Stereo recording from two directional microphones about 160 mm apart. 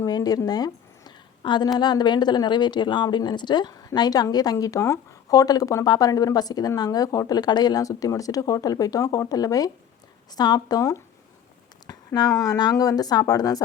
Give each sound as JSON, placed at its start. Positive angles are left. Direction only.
{"t": 0.0, "sound": "a woman's voice", "side_deg": 25}